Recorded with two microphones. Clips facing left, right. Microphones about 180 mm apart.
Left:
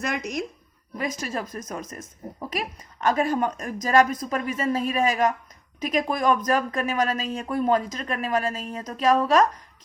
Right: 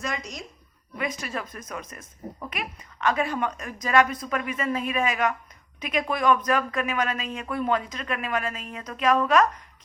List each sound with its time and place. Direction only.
0.0 s speech: 60° left (ahead or behind)
0.9 s a woman's voice: 40° left (ahead or behind)